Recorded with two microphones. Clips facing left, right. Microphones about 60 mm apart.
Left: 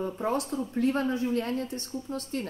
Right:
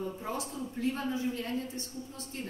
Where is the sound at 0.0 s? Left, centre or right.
Left.